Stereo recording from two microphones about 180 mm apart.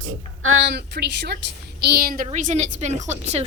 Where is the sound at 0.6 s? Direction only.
70° right (ahead or behind).